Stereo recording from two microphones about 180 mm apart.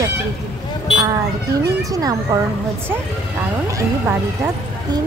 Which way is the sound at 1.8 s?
20° right (ahead or behind).